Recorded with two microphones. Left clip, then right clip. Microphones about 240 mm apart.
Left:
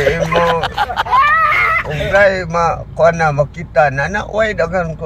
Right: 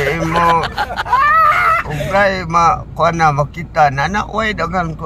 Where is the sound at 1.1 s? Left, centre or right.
Centre.